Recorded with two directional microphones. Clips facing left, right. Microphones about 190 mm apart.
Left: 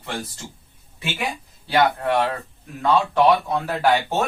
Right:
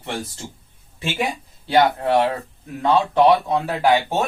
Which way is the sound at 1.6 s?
25° right (ahead or behind).